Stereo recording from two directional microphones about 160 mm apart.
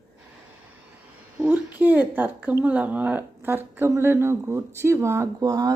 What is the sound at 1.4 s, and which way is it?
Speech, 10° right (ahead or behind).